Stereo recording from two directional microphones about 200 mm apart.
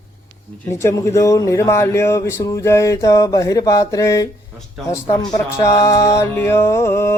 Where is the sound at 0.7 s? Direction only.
15° left (ahead or behind).